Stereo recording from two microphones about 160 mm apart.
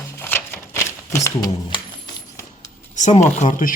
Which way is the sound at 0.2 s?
15° left (ahead or behind).